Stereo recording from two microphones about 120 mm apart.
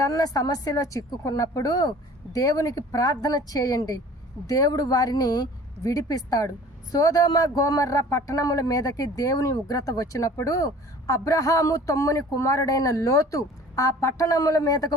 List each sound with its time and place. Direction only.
0.0 s speech: 30° left (ahead or behind)